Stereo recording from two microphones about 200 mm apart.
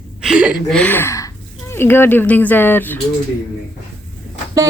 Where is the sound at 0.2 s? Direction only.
5° right (ahead or behind).